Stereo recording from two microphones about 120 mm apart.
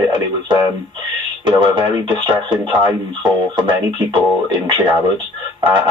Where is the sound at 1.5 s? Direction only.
40° right (ahead or behind).